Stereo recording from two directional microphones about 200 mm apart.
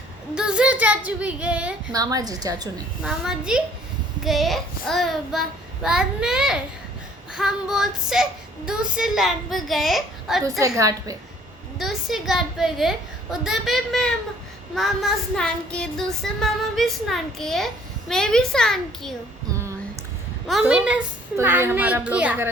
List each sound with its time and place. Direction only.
0.3 s music: 5° right (ahead or behind)
1.9 s a woman's voice: 20° right (ahead or behind)
3.0 s music: 5° right (ahead or behind)
10.8 s a woman's voice: 15° right (ahead or behind)
11.8 s music: centre (ahead or behind)
20.5 s a woman's voice: 5° right (ahead or behind)